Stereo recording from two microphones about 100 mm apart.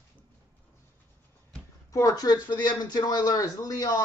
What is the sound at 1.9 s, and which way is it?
Speech, 35° left (ahead or behind).